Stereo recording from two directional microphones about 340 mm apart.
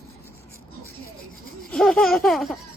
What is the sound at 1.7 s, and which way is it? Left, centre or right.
Speech, centre.